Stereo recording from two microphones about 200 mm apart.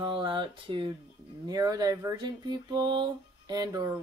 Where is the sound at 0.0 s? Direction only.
25° right (ahead or behind).